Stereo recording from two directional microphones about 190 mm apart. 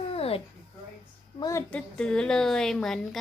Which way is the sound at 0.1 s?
30° left (ahead or behind).